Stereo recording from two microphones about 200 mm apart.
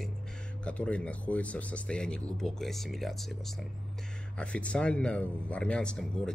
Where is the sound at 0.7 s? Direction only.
5° left (ahead or behind).